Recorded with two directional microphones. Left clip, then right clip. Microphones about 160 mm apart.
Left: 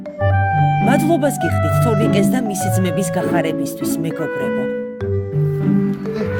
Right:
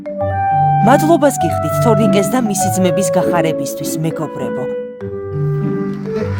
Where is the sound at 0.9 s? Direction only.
30° right (ahead or behind).